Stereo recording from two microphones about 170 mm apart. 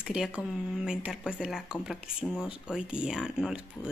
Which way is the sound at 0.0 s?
5° right (ahead or behind).